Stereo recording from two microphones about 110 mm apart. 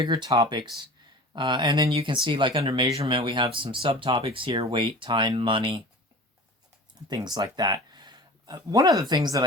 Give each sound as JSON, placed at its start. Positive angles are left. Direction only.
{"t": 0.0, "sound": "speech", "side_deg": -40}
{"t": 2.5, "sound": "speech", "side_deg": -60}
{"t": 7.1, "sound": "speech", "side_deg": -40}